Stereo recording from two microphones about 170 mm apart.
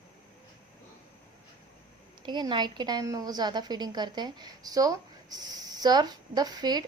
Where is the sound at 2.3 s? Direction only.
25° right (ahead or behind).